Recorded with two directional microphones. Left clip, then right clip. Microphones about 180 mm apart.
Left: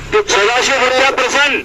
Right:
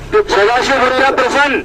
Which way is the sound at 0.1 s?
60° right (ahead or behind).